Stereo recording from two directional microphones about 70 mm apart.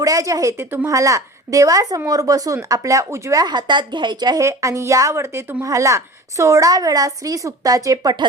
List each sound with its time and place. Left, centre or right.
0.0 s a woman's voice: right
0.5 s speech: right
0.9 s a woman's voice: right
3.4 s a woman's voice: right
4.4 s speech: right
5.6 s a woman's voice: right